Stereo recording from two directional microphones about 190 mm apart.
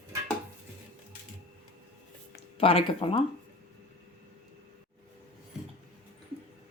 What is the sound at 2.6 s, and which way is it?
Speech, 30° left (ahead or behind).